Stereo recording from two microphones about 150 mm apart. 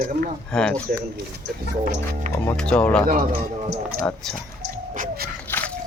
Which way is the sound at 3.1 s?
85° right.